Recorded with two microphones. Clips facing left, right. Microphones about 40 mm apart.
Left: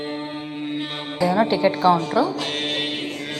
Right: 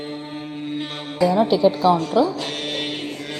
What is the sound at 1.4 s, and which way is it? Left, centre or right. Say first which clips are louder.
Speech: even; left.